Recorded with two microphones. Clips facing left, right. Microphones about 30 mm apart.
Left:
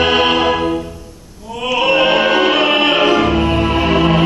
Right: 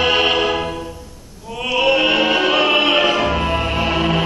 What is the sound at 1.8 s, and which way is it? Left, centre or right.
Music, centre.